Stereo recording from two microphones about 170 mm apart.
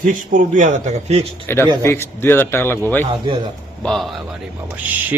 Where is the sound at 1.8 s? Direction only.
15° left (ahead or behind).